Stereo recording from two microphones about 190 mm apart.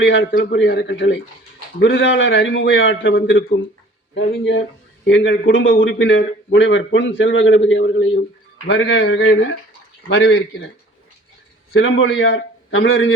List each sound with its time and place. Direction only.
0.0 s a man's voice: 80° left
4.1 s a man's voice: 70° left (ahead or behind)
11.7 s a man's voice: 85° left